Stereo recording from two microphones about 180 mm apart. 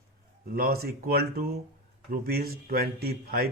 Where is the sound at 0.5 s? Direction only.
55° right (ahead or behind).